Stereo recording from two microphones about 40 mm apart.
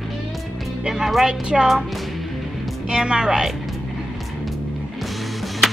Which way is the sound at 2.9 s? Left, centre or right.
Right.